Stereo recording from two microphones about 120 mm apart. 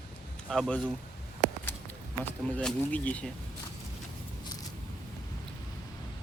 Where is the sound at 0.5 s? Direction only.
5° left (ahead or behind).